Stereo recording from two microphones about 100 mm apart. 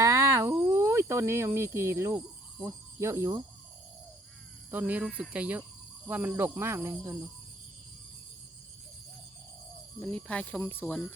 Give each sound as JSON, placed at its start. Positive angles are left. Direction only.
{"t": 0.0, "sound": "cricket", "side_deg": -35}
{"t": 2.6, "sound": "speech", "side_deg": -30}
{"t": 4.7, "sound": "speech", "side_deg": -15}
{"t": 10.0, "sound": "speech", "side_deg": 10}